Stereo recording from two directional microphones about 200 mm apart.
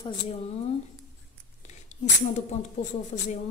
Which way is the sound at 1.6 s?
35° left (ahead or behind).